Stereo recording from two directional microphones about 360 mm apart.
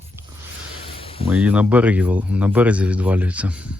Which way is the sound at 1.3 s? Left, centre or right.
Centre.